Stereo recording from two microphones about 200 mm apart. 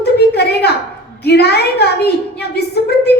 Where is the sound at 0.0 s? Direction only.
55° left (ahead or behind).